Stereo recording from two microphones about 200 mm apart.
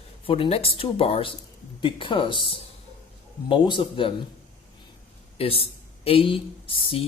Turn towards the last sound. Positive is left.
turn(degrees=30)  # may be behind; listen again after turning